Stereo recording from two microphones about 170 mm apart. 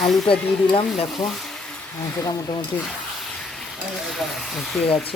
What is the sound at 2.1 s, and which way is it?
Speech, 20° left (ahead or behind).